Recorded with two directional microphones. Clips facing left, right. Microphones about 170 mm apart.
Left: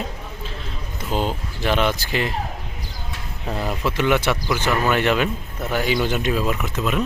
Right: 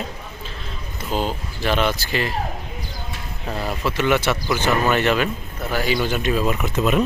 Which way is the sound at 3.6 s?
5° right (ahead or behind).